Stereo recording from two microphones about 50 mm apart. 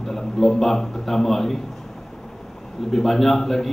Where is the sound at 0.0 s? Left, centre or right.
Centre.